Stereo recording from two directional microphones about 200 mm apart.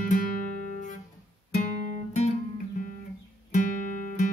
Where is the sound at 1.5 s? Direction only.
40° left (ahead or behind).